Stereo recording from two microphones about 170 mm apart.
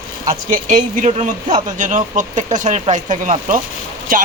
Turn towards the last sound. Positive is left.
turn(degrees=-55)  # may be behind; listen again after turning